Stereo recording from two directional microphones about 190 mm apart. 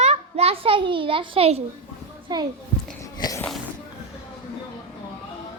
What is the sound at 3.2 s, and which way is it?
Speech, 20° left (ahead or behind).